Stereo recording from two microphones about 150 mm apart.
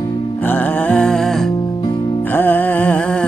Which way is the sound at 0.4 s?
10° left (ahead or behind).